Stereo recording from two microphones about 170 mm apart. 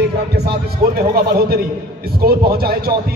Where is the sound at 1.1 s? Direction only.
60° right (ahead or behind).